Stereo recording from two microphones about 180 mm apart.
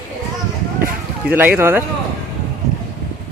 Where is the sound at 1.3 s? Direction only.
10° right (ahead or behind).